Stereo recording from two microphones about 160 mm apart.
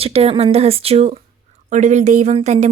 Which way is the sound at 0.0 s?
35° right (ahead or behind).